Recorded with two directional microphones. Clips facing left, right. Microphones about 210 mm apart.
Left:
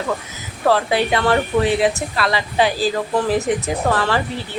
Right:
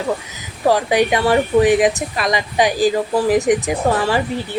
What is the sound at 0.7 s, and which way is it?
A woman's voice, 15° right (ahead or behind).